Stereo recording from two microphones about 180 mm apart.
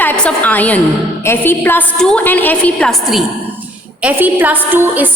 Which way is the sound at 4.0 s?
10° right (ahead or behind).